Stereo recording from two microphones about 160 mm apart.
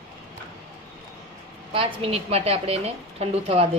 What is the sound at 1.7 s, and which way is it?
A woman's voice, 35° right (ahead or behind).